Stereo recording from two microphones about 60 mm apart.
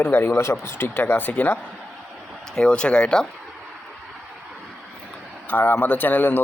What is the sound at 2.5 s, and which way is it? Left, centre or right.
Speech, centre.